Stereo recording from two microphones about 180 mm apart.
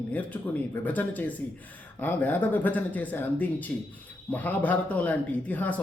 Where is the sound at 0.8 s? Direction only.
10° left (ahead or behind).